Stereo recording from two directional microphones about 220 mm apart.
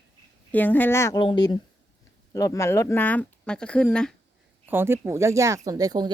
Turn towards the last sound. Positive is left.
turn(degrees=-15)  # may be behind; listen again after turning